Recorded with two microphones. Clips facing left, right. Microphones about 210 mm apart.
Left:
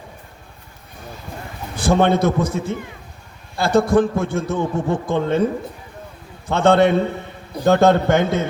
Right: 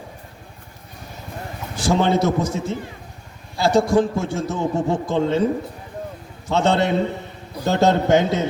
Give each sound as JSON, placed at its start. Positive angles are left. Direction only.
{"t": 1.7, "sound": "a man's voice", "side_deg": 55}
{"t": 6.5, "sound": "a man's voice", "side_deg": 55}